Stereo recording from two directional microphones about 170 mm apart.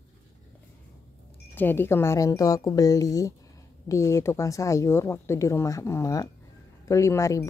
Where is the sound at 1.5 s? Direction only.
10° left (ahead or behind).